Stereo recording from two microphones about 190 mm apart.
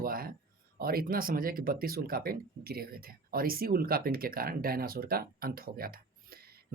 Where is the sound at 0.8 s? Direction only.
50° right (ahead or behind).